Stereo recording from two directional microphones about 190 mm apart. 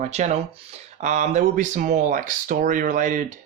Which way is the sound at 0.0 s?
35° right (ahead or behind).